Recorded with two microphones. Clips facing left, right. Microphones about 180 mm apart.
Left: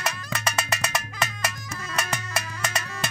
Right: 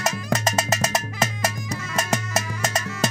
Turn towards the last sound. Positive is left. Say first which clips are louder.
# right 6 dB
turn(degrees=-45)  # may be behind; listen again after turning